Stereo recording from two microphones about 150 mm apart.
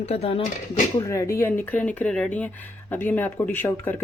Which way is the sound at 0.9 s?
20° left (ahead or behind).